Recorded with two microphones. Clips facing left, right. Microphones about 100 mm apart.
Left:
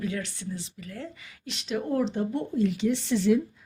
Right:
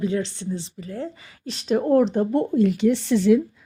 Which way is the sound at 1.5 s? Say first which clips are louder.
Right 10 dB; 40° right (ahead or behind).